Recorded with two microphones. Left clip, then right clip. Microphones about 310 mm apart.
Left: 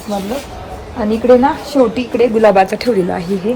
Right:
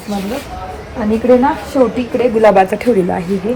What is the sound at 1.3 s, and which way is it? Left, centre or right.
A woman's voice, centre.